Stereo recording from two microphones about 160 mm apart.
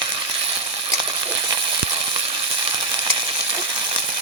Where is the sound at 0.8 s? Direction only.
35° right (ahead or behind).